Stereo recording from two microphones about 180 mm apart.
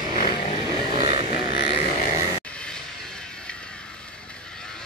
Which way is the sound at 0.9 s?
30° right (ahead or behind).